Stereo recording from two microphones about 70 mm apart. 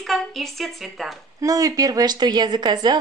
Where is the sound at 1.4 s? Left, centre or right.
Right.